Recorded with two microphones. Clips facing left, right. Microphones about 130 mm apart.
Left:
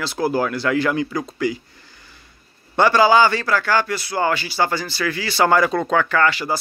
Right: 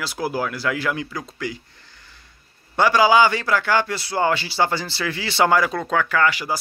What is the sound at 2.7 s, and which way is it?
A man's voice, 10° right (ahead or behind).